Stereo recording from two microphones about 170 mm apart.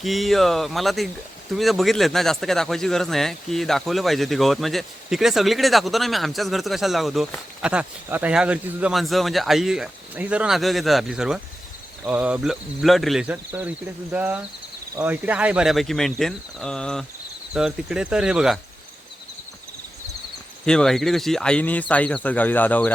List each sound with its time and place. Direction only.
0.0 s speech: centre (ahead or behind)
20.7 s speech: 5° left (ahead or behind)